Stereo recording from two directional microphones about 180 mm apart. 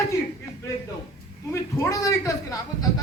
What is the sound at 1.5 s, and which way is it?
Speech, 15° left (ahead or behind).